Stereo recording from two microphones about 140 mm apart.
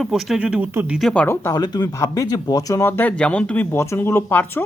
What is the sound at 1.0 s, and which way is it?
Speech, 5° left (ahead or behind).